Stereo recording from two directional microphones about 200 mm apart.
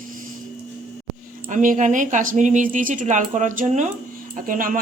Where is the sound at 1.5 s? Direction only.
40° right (ahead or behind).